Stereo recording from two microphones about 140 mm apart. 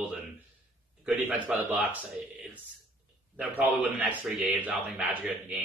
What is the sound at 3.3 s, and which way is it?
Speech, 10° right (ahead or behind).